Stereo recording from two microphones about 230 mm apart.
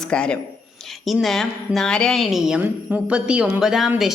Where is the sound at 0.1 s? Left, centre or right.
Centre.